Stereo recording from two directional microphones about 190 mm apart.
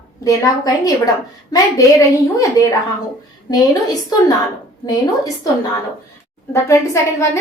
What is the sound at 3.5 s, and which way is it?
Speech, 20° left (ahead or behind).